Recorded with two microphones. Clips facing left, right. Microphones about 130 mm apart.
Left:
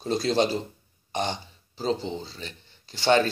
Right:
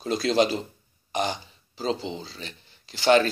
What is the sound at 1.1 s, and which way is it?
Burping, 30° left (ahead or behind).